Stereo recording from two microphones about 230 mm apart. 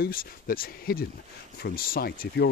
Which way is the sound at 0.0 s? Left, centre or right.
Left.